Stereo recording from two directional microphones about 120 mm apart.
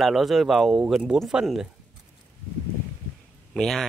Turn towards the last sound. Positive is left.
turn(degrees=5)  # may be behind; listen again after turning